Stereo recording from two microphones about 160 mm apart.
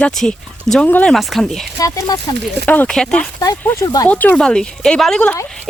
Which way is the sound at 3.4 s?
20° left (ahead or behind).